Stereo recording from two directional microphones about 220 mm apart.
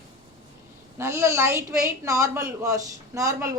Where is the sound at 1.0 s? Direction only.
15° right (ahead or behind).